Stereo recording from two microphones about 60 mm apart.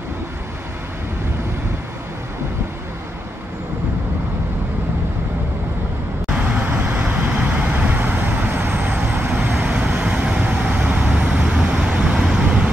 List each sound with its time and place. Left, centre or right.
6.3 s vehicle: right
9.6 s vehicle: centre